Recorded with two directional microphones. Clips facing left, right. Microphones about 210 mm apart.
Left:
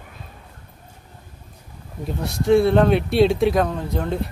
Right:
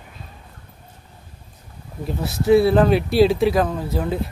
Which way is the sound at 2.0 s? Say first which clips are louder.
Right 1 dB; 5° right (ahead or behind).